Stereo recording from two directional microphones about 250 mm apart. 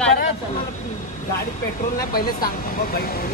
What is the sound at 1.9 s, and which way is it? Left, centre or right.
Speech, left.